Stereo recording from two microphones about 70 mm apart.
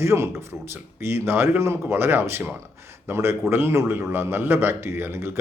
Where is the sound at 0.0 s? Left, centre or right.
Right.